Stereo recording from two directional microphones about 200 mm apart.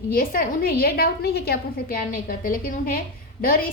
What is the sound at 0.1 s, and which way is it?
A woman's voice, 45° left (ahead or behind).